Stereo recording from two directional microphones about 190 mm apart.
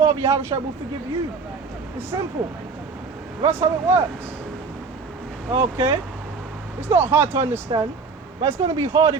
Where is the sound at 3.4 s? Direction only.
15° right (ahead or behind).